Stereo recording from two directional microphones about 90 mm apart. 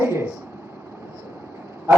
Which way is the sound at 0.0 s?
30° right (ahead or behind).